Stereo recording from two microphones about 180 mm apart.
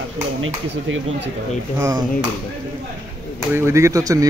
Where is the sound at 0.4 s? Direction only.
90° right.